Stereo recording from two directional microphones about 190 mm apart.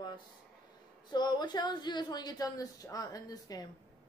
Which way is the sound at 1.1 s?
20° left (ahead or behind).